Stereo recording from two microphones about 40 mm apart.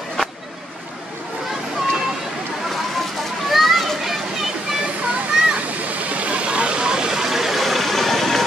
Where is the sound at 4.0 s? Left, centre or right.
Centre.